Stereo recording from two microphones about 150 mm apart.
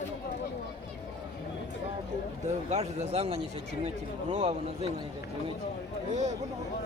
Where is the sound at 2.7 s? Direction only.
50° right (ahead or behind).